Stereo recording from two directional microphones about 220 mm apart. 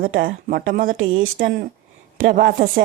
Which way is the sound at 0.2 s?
40° right (ahead or behind).